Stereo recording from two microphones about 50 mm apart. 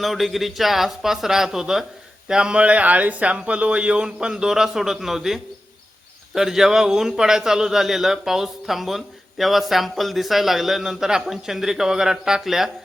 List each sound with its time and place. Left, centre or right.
0.0 s a man's voice: centre